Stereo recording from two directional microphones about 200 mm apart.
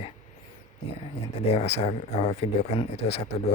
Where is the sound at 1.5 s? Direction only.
30° left (ahead or behind).